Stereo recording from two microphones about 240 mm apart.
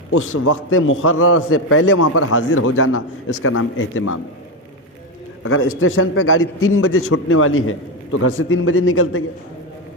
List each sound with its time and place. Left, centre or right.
0.1 s a man's voice: left
5.4 s a man's voice: left